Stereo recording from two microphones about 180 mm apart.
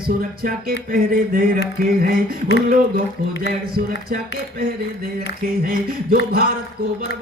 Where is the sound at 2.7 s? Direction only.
50° right (ahead or behind).